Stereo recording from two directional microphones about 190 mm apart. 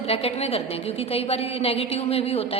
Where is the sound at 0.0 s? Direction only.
30° left (ahead or behind).